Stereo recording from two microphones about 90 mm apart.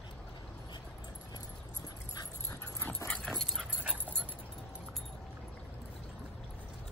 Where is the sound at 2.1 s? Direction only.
45° left (ahead or behind).